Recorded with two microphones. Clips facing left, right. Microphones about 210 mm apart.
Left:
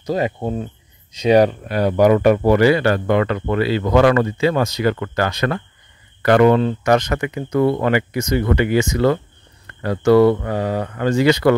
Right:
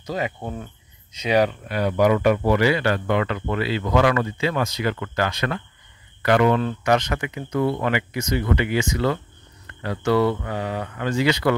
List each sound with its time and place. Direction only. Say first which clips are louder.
0.0 s speech: left 7 dB; 40° left (ahead or behind)